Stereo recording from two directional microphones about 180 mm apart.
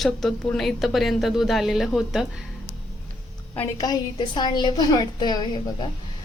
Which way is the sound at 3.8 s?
25° left (ahead or behind).